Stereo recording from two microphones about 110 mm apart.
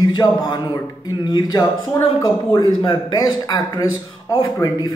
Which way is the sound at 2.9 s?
40° left (ahead or behind).